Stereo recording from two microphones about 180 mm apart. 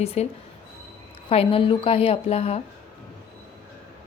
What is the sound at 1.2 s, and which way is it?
A woman's voice, 30° left (ahead or behind).